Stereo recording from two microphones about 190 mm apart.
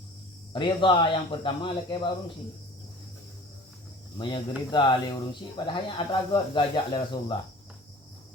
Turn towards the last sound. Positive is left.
turn(degrees=25)  # may be behind; listen again after turning